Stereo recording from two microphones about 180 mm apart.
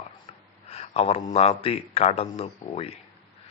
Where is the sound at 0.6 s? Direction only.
35° left (ahead or behind).